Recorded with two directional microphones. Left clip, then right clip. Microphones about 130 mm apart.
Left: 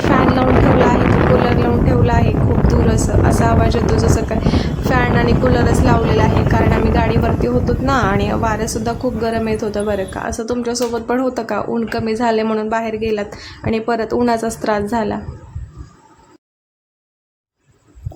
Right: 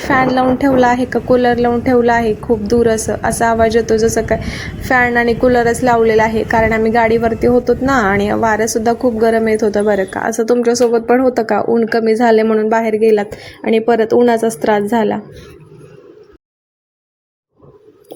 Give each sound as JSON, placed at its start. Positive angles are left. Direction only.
{"t": 0.1, "sound": "speech", "side_deg": -35}